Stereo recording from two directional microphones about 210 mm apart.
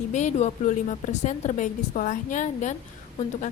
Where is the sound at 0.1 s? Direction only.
35° left (ahead or behind).